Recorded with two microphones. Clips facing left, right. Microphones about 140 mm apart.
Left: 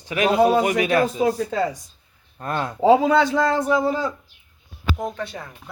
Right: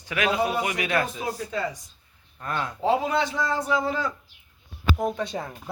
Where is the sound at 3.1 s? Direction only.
90° left; by 3.7 s 70° left (ahead or behind).